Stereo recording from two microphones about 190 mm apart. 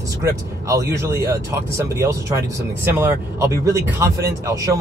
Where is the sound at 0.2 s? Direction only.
15° right (ahead or behind).